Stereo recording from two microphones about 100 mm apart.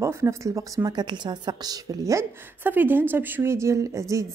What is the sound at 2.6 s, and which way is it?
Speech, 20° right (ahead or behind).